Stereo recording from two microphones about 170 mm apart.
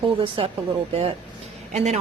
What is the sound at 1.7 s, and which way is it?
Speech, 40° right (ahead or behind).